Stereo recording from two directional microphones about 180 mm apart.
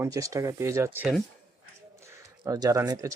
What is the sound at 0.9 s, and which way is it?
Speech, centre (ahead or behind).